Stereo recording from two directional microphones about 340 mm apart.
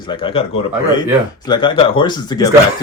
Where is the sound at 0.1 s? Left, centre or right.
Centre.